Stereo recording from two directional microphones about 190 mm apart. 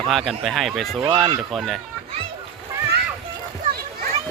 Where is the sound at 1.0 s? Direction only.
25° right (ahead or behind).